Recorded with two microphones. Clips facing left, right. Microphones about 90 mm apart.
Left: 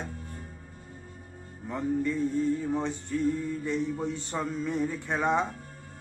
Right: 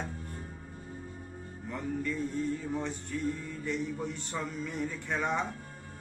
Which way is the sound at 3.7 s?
20° left (ahead or behind).